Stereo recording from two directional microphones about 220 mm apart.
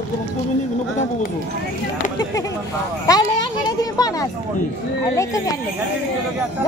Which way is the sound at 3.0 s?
15° left (ahead or behind).